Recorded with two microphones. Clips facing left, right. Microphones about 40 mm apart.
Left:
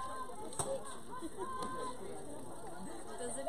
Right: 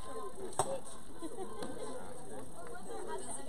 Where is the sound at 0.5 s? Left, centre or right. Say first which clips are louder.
Right 4 dB; right.